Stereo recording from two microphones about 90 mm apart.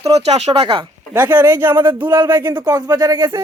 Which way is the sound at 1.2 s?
20° right (ahead or behind).